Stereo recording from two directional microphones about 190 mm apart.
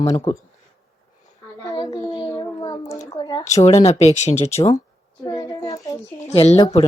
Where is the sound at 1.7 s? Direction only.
25° left (ahead or behind).